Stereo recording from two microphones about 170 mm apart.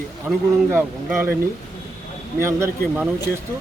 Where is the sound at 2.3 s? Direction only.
15° right (ahead or behind).